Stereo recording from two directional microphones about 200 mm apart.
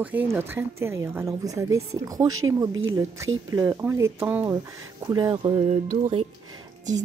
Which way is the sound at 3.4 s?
15° right (ahead or behind).